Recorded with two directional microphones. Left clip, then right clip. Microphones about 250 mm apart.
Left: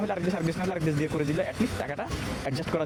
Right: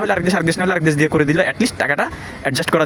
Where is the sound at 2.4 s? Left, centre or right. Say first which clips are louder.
Right 15 dB; right.